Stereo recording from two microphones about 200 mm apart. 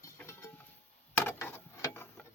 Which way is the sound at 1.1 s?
10° left (ahead or behind).